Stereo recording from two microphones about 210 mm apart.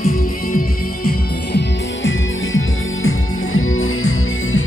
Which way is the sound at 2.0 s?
70° left (ahead or behind).